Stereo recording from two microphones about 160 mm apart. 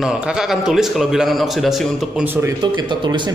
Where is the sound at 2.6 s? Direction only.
30° right (ahead or behind).